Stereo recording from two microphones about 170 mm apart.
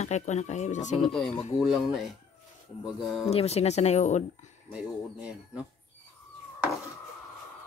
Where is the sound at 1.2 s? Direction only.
35° left (ahead or behind).